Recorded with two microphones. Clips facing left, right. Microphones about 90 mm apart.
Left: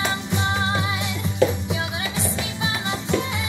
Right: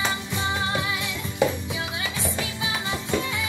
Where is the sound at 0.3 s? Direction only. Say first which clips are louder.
Left 3 dB; 20° left (ahead or behind).